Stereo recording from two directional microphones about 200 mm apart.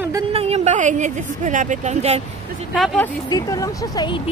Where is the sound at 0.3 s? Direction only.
30° right (ahead or behind).